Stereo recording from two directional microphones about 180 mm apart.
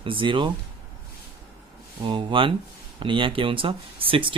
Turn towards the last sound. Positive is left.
turn(degrees=-30)  # may be behind; listen again after turning